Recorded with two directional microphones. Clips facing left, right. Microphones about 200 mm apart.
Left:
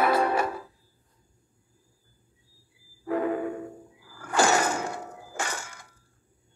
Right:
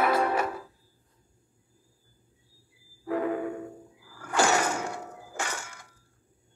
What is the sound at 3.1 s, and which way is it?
Music, 35° left (ahead or behind).